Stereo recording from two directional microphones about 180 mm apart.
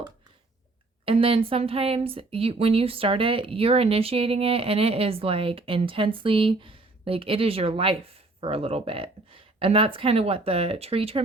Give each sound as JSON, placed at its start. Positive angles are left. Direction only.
{"t": 1.0, "sound": "speech", "side_deg": -30}